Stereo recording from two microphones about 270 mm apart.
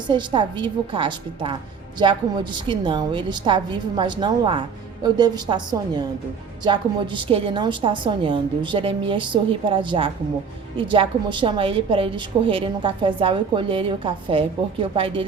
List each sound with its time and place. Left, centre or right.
0.1 s a woman's voice: centre